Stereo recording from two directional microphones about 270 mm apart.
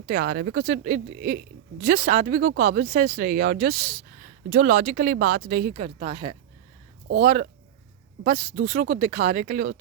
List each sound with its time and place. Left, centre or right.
0.1 s speech: right; by 6.3 s centre
8.2 s speech: right